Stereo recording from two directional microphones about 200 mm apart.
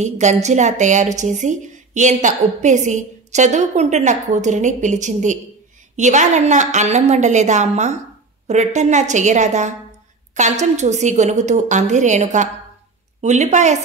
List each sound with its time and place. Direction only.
0.0 s a woman's voice: 35° right (ahead or behind)